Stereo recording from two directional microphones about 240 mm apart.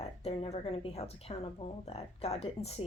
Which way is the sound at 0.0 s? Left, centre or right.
Left.